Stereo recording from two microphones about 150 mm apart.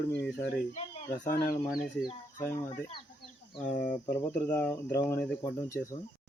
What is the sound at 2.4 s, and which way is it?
Speech, 15° left (ahead or behind).